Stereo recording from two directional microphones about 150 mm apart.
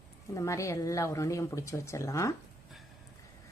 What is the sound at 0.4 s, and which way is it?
Speech, 20° left (ahead or behind).